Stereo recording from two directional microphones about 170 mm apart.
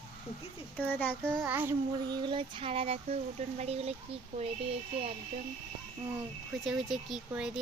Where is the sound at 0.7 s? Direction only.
10° left (ahead or behind).